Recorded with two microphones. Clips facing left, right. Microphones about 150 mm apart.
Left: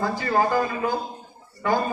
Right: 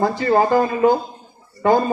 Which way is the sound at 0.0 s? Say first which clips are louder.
Right 6 dB; 20° right (ahead or behind).